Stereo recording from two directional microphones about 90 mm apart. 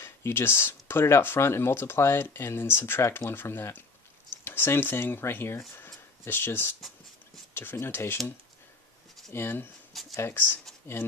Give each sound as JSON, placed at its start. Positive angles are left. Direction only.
{"t": 0.0, "sound": "speech", "side_deg": 30}
{"t": 9.3, "sound": "speech", "side_deg": 25}